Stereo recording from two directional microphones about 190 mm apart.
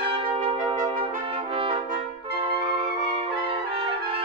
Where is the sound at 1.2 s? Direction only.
30° right (ahead or behind).